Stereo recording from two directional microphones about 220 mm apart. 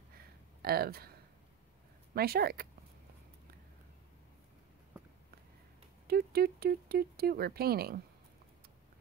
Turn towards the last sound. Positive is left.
turn(degrees=-45)  # may be behind; listen again after turning